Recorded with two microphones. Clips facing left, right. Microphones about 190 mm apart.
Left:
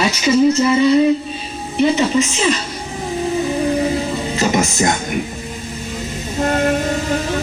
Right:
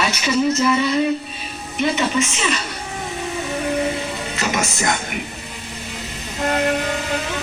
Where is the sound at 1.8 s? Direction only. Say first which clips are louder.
Left 5 dB; 30° left (ahead or behind).